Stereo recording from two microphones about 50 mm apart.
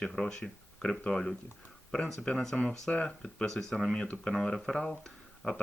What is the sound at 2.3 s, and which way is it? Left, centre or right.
Speech, centre.